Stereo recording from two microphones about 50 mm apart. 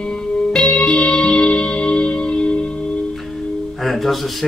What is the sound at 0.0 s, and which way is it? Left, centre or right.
Music, left.